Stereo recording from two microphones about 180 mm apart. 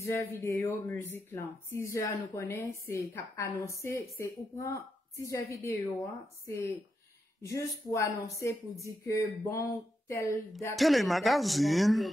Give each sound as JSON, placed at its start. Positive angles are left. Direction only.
{"t": 0.0, "sound": "speech", "side_deg": 15}
{"t": 10.8, "sound": "speech", "side_deg": 0}